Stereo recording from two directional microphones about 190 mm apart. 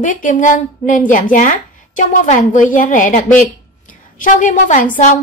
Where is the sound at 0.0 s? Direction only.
45° left (ahead or behind).